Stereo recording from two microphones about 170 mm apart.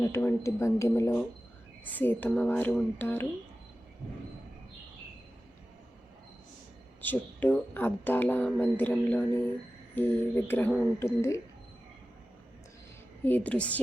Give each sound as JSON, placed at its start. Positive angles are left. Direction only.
{"t": 0.0, "sound": "speech", "side_deg": 15}
{"t": 7.0, "sound": "speech", "side_deg": 10}
{"t": 13.2, "sound": "speech", "side_deg": 10}